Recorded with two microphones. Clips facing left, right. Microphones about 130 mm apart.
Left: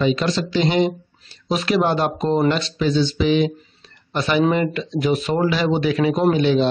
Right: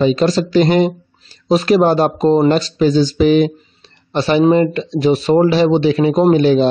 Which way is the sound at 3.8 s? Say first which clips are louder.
Right 6 dB; 30° right (ahead or behind).